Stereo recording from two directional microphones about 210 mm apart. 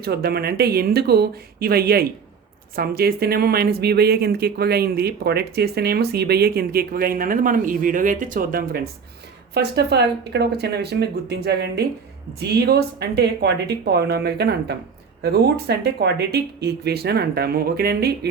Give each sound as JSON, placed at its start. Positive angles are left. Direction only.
{"t": 0.0, "sound": "speech", "side_deg": -50}